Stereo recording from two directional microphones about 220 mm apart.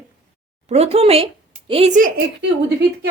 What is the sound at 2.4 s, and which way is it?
Speech, 50° right (ahead or behind).